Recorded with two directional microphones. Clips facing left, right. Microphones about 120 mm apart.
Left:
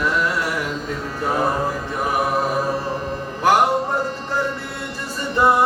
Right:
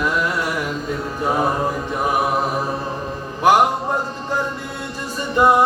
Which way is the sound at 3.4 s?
15° right (ahead or behind).